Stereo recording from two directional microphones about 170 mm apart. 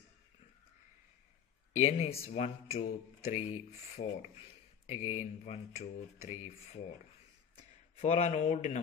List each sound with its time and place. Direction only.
1.8 s speech: 40° left (ahead or behind)